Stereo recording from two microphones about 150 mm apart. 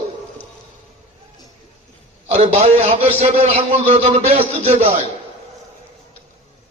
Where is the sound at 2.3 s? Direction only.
45° right (ahead or behind).